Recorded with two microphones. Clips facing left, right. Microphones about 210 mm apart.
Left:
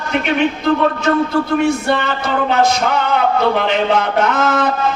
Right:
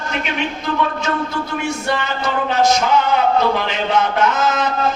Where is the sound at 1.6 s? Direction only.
55° left (ahead or behind).